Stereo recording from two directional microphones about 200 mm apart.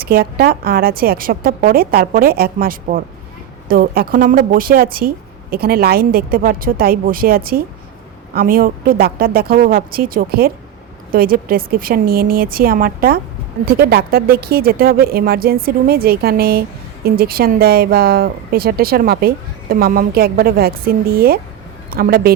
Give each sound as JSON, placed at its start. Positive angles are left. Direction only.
{"t": 0.0, "sound": "speech", "side_deg": -50}